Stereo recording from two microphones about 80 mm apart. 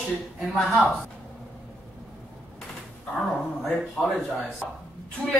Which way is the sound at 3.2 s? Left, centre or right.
Centre.